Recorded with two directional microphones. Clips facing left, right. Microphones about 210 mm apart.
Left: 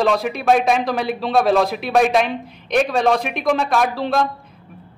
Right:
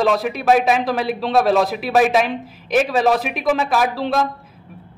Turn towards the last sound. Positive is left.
turn(degrees=0)  # may be behind; listen again after turning